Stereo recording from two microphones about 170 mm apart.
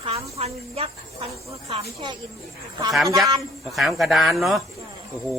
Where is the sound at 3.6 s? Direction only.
Centre (ahead or behind).